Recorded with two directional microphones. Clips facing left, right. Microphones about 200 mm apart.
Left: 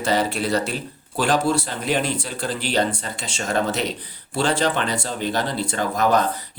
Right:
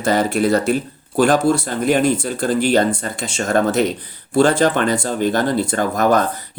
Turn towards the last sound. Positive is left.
turn(degrees=-50)  # may be behind; listen again after turning